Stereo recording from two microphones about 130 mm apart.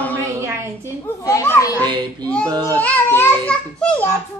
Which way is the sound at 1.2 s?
25° left (ahead or behind).